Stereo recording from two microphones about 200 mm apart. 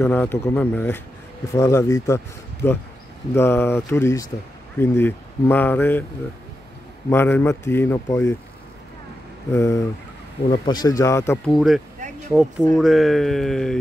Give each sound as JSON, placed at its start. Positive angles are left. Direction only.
{"t": 0.0, "sound": "speech", "side_deg": 10}
{"t": 7.1, "sound": "speech", "side_deg": 10}
{"t": 9.5, "sound": "speech", "side_deg": 15}
{"t": 11.4, "sound": "speech", "side_deg": 0}
{"t": 12.0, "sound": "a sound", "side_deg": -35}
{"t": 12.7, "sound": "speech", "side_deg": 0}